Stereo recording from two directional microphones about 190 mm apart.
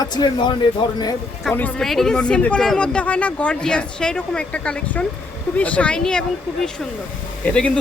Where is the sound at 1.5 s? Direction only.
5° left (ahead or behind).